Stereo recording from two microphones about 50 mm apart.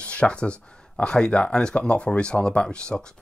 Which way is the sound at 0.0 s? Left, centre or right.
Left.